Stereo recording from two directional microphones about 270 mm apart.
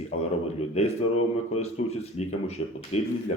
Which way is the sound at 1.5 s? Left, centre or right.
Left.